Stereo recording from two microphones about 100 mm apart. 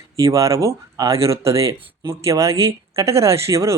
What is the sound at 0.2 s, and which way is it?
Speech, 30° right (ahead or behind).